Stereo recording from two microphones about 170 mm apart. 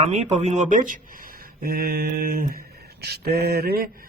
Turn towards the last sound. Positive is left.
turn(degrees=-65)  # may be behind; listen again after turning